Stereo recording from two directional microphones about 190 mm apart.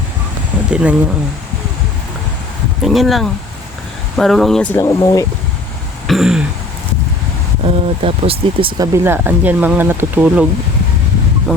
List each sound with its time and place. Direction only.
0.7 s speech: 5° right (ahead or behind)
2.8 s speech: centre (ahead or behind); by 5.2 s 20° left (ahead or behind)
6.1 s speech: centre (ahead or behind)
7.6 s speech: 30° right (ahead or behind)
9.0 s speech: 10° right (ahead or behind)